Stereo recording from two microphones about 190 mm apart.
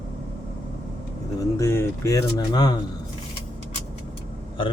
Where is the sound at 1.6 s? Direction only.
15° left (ahead or behind).